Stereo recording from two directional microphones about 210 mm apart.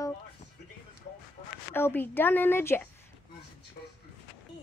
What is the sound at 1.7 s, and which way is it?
Speech, 10° left (ahead or behind).